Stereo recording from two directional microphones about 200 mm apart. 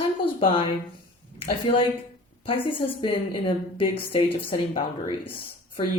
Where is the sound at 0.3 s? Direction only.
25° left (ahead or behind).